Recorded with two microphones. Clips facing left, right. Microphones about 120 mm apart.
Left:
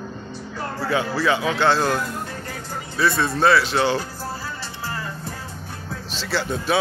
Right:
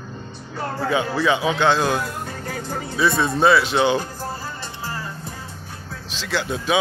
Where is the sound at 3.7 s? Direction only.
20° right (ahead or behind).